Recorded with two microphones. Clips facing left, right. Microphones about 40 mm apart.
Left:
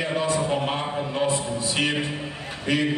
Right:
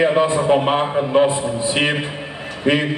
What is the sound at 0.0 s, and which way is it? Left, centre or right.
A man's voice, right.